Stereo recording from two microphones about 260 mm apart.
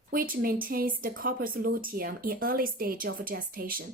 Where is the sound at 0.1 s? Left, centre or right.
Right.